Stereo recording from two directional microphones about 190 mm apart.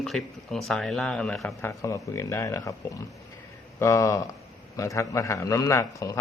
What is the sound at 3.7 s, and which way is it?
A man's voice, 15° left (ahead or behind).